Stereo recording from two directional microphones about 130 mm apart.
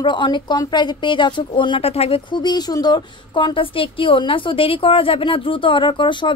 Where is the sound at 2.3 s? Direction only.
35° left (ahead or behind).